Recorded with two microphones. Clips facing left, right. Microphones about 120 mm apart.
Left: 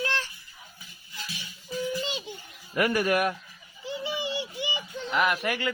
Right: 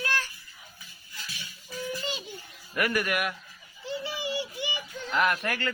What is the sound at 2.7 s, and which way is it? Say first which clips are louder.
Speech: left 4 dB; 25° left (ahead or behind).